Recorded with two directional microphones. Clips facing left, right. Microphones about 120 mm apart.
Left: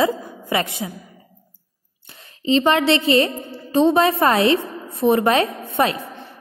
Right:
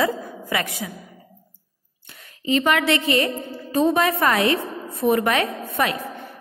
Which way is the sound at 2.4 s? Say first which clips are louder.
Left 3 dB; 30° left (ahead or behind).